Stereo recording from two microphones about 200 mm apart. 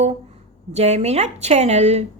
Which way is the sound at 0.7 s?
35° right (ahead or behind).